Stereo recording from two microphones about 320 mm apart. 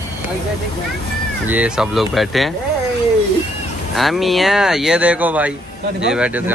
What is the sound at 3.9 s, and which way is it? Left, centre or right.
Speech, centre.